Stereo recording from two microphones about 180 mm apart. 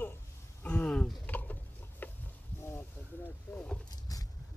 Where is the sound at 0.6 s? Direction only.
5° left (ahead or behind).